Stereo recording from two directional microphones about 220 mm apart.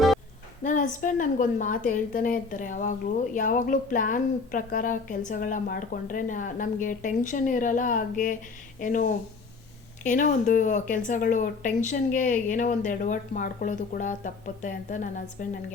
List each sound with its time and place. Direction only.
0.6 s speech: 35° left (ahead or behind)